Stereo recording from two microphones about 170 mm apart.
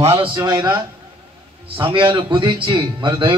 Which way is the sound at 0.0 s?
35° right (ahead or behind).